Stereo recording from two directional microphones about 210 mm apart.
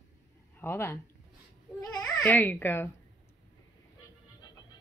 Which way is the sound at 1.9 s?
10° left (ahead or behind).